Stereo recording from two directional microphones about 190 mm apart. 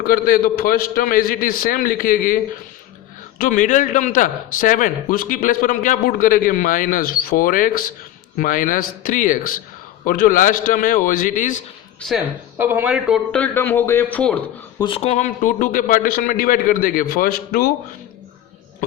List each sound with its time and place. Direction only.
0.0 s a man's voice: 50° left (ahead or behind)
11.9 s speech: centre (ahead or behind)
12.5 s a man's voice: 10° right (ahead or behind); by 14.3 s 5° left (ahead or behind)
14.8 s a man's voice: 30° left (ahead or behind); by 17.7 s 50° left (ahead or behind)